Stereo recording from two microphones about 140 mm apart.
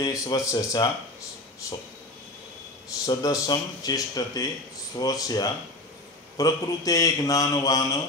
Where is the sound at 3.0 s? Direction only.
25° left (ahead or behind).